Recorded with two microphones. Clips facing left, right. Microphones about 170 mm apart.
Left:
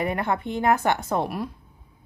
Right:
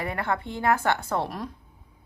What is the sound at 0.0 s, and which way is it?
A woman's voice, 20° left (ahead or behind).